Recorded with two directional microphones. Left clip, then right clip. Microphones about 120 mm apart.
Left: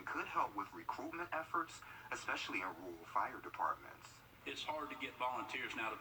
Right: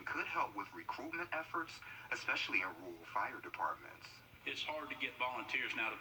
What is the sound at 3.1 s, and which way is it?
Speech, 15° right (ahead or behind).